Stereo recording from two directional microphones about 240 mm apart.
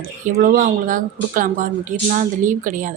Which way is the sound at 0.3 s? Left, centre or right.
Right.